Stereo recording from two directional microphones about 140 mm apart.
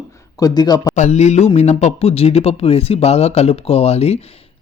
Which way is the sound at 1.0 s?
50° left (ahead or behind).